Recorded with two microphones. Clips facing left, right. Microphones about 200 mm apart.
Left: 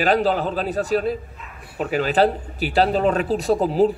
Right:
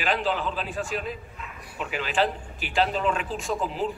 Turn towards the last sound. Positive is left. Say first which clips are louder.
# left 10 dB
turn(degrees=40)  # may be behind; listen again after turning